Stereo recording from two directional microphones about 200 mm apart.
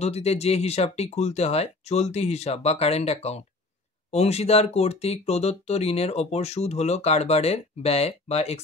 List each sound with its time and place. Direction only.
0.0 s speech: 30° left (ahead or behind)